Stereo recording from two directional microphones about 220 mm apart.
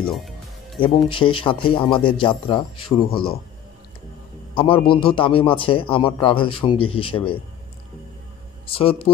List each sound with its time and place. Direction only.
0.0 s music: centre (ahead or behind)
0.7 s a man's voice: 25° left (ahead or behind)
4.6 s a man's voice: 25° left (ahead or behind)
8.7 s a man's voice: 25° left (ahead or behind)